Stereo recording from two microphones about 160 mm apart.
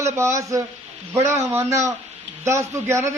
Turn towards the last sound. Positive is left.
turn(degrees=-15)  # may be behind; listen again after turning